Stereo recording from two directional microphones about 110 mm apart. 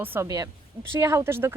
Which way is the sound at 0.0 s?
20° right (ahead or behind).